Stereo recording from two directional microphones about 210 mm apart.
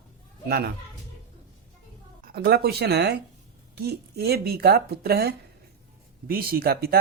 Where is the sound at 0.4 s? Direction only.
45° right (ahead or behind).